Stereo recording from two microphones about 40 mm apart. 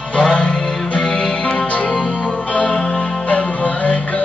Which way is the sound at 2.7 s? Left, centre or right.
Centre.